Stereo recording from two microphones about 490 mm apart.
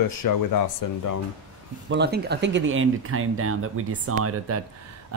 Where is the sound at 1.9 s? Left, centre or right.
Centre.